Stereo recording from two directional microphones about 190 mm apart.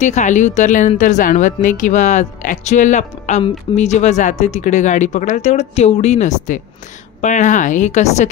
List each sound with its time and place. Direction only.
0.0 s a woman's voice: 40° left (ahead or behind)